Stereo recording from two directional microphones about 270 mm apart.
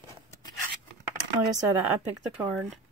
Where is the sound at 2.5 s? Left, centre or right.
Centre.